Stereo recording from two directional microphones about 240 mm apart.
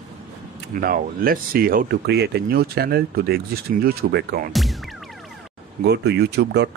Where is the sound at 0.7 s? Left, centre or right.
Right.